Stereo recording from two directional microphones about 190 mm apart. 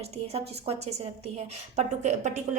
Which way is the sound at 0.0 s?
35° right (ahead or behind).